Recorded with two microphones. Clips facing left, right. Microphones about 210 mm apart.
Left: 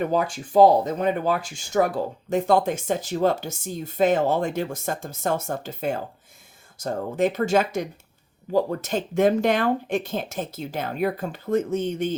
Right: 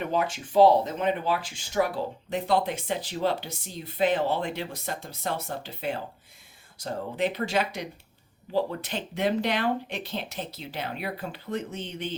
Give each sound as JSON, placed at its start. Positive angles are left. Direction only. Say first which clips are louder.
{"t": 0.0, "sound": "speech", "louder": "left 4 dB", "side_deg": 40}